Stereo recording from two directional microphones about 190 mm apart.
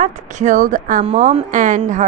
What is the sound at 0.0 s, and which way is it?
A woman's voice, 40° right (ahead or behind).